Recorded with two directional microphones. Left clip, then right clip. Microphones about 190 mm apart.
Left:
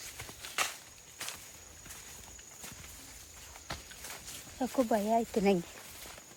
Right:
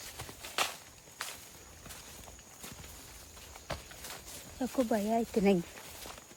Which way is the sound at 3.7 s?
35° right (ahead or behind).